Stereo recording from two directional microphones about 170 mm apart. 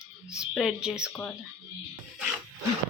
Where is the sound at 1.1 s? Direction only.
10° left (ahead or behind).